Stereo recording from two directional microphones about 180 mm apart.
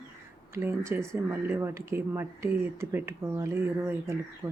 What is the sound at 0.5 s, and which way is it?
Speech, 15° right (ahead or behind).